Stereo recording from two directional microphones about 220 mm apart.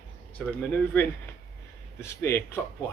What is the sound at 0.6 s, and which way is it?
Speech, 10° left (ahead or behind).